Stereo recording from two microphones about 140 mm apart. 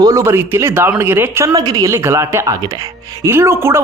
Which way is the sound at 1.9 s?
20° right (ahead or behind).